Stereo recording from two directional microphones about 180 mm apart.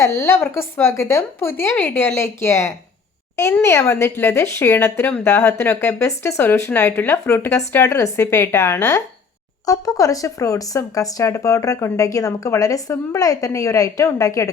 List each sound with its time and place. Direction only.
0.0 s speech: 15° left (ahead or behind)